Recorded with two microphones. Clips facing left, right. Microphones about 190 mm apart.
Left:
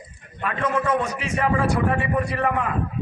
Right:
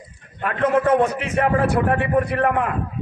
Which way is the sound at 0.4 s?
60° right (ahead or behind).